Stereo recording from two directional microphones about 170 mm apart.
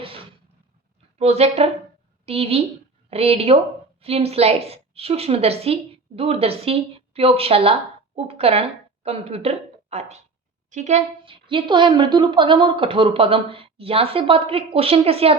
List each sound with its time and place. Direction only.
1.2 s a woman's voice: 35° right (ahead or behind)
11.3 s a woman's voice: 30° right (ahead or behind)